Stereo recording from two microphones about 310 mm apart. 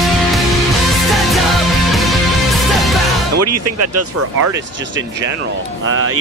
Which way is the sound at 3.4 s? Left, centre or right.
Right.